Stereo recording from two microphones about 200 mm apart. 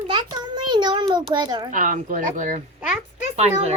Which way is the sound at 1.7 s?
40° right (ahead or behind).